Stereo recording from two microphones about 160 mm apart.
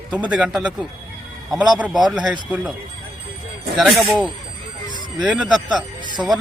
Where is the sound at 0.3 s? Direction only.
5° right (ahead or behind).